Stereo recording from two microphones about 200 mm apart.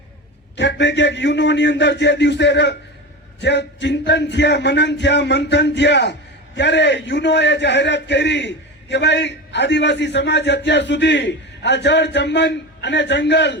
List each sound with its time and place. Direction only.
0.5 s a man's voice: 60° left (ahead or behind)